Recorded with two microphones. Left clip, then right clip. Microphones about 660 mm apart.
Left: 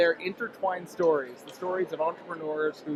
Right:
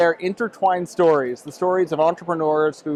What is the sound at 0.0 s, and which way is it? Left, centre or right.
Speech, right.